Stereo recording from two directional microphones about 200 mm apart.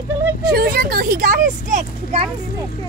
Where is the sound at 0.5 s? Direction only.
50° right (ahead or behind).